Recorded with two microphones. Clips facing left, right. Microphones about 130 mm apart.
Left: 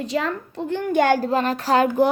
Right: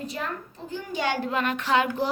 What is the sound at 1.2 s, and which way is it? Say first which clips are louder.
Speech: left 5 dB; 35° left (ahead or behind).